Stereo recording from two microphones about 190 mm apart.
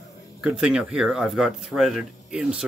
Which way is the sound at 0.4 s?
5° right (ahead or behind).